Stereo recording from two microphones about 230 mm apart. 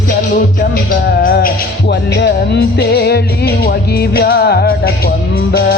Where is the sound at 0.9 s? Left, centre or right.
Left.